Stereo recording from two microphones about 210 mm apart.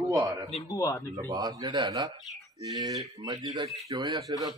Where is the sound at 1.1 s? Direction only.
15° right (ahead or behind).